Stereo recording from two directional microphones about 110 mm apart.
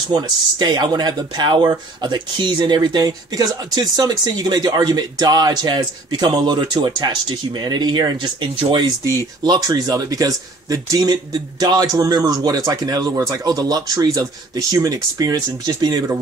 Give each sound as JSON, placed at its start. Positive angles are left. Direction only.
{"t": 0.1, "sound": "speech", "side_deg": -40}